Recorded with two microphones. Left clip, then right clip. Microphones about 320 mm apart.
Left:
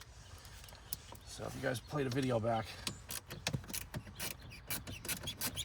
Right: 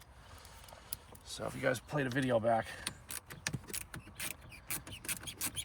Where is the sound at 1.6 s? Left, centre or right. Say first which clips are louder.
Right 4 dB; right.